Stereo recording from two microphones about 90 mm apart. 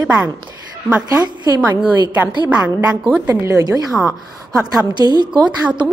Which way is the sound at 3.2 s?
40° right (ahead or behind).